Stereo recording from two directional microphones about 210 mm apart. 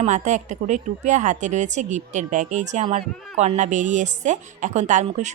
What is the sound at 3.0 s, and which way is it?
Speech, centre (ahead or behind).